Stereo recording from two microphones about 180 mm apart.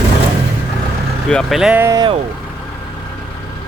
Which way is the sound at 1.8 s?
20° right (ahead or behind).